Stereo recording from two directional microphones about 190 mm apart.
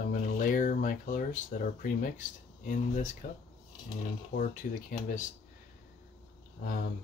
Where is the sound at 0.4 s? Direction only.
45° left (ahead or behind).